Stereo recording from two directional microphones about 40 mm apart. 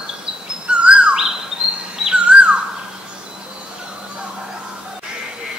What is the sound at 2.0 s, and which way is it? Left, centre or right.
Bird vocalization, centre.